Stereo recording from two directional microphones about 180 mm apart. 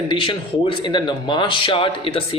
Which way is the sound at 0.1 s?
30° left (ahead or behind).